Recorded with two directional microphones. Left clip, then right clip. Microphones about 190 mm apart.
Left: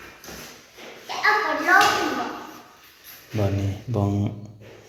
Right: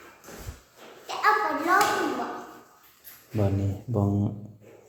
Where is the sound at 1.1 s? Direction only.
55° right (ahead or behind).